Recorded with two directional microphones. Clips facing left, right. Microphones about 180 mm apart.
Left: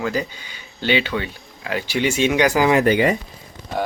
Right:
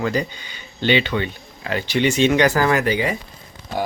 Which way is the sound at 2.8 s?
50° left (ahead or behind).